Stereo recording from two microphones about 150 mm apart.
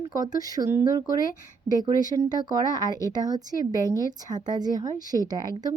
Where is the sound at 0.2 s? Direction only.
25° right (ahead or behind).